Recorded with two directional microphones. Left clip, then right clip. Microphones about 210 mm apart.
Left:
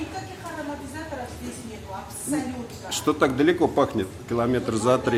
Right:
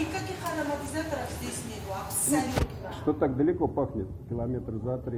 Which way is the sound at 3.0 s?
35° left (ahead or behind).